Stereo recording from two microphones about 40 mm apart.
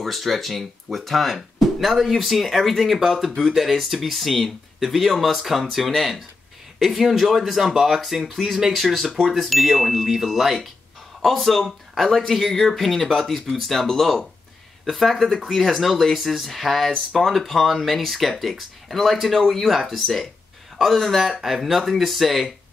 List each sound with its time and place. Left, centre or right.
0.0 s speech: centre
11.2 s speech: centre
16.9 s speech: centre
17.3 s speech: centre